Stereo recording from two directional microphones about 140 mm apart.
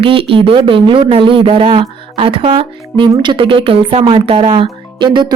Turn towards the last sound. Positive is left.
turn(degrees=-35)  # may be behind; listen again after turning